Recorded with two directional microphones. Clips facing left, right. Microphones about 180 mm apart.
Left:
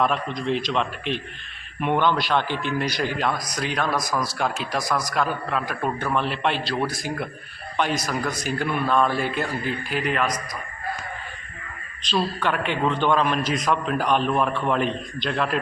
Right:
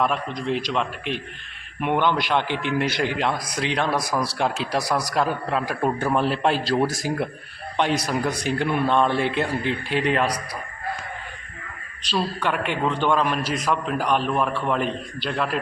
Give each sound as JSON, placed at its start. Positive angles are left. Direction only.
{"t": 0.0, "sound": "a man's voice", "side_deg": -10}
{"t": 7.8, "sound": "a man's voice", "side_deg": -30}
{"t": 12.0, "sound": "a man's voice", "side_deg": -10}